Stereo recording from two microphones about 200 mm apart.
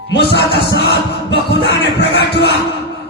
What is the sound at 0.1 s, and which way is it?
Music, 55° left (ahead or behind).